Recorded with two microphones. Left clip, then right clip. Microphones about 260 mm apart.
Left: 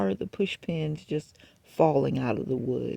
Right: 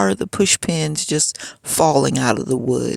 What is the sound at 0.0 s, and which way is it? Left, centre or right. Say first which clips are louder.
Speech: right 11 dB; right.